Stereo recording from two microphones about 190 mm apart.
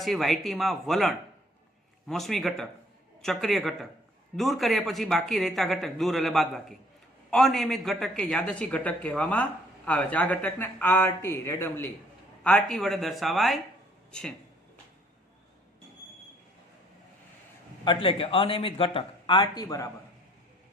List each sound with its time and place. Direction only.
0.0 s speech: centre (ahead or behind)
17.8 s speech: 30° left (ahead or behind)